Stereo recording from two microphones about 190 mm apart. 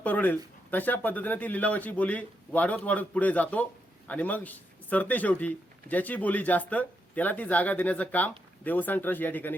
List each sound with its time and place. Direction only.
0.0 s speech: 10° left (ahead or behind)